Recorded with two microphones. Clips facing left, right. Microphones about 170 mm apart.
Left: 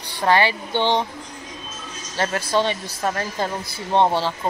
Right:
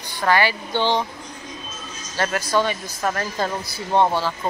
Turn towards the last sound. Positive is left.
turn(degrees=25)  # may be behind; listen again after turning